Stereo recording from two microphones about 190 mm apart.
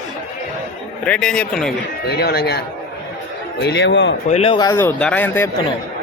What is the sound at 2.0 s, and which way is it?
Speech, 55° left (ahead or behind).